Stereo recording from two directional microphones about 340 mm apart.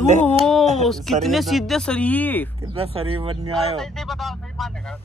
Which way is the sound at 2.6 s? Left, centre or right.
Centre.